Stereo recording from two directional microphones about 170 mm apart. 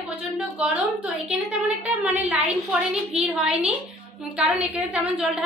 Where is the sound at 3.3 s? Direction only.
5° right (ahead or behind).